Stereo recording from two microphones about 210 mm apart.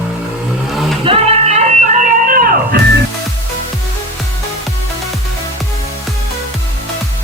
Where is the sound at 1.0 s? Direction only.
30° right (ahead or behind); by 2.8 s 45° right (ahead or behind).